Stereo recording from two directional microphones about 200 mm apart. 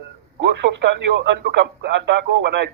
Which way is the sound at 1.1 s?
60° right (ahead or behind).